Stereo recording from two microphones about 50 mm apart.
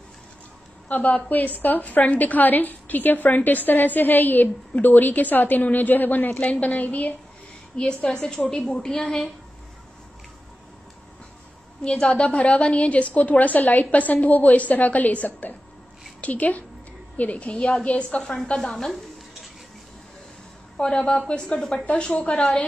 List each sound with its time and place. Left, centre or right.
0.8 s a woman's voice: left
7.7 s a woman's voice: centre
11.8 s a woman's voice: centre
18.2 s a woman's voice: centre
20.7 s a woman's voice: left
21.8 s a woman's voice: left